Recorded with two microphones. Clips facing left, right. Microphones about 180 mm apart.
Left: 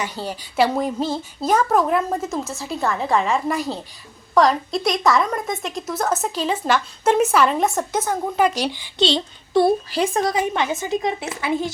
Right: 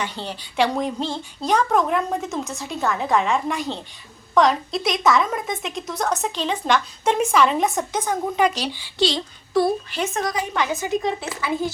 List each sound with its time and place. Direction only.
0.0 s a woman's voice: 10° left (ahead or behind); by 11.1 s 25° left (ahead or behind)